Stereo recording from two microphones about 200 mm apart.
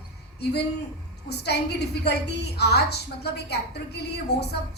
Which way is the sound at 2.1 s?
55° left (ahead or behind).